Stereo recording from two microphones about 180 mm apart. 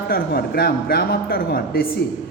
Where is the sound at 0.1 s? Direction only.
60° left (ahead or behind).